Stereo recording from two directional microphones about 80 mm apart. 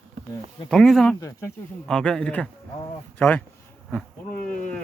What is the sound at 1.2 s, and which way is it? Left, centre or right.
Speech, left.